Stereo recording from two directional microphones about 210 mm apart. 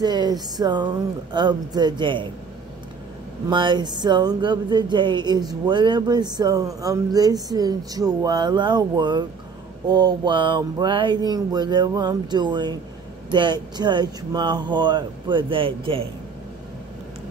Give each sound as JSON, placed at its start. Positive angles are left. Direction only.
{"t": 0.0, "sound": "speech", "side_deg": -20}
{"t": 3.4, "sound": "speech", "side_deg": -20}